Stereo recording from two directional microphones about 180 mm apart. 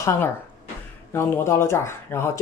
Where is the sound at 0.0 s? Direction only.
15° left (ahead or behind).